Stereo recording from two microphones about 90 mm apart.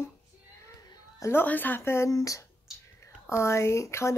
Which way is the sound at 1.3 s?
20° left (ahead or behind).